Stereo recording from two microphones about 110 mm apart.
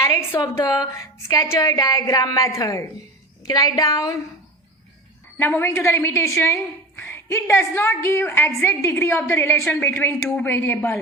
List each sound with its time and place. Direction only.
0.0 s a woman's voice: 25° left (ahead or behind)
0.4 s a woman's voice: 40° left (ahead or behind)
5.4 s a woman's voice: 20° left (ahead or behind)